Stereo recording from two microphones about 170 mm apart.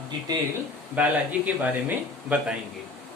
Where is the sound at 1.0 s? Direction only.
10° right (ahead or behind).